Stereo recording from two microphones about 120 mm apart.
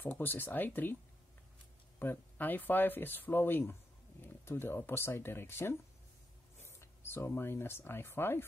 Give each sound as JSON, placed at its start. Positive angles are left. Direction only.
{"t": 0.0, "sound": "speech", "side_deg": 15}
{"t": 2.0, "sound": "speech", "side_deg": 15}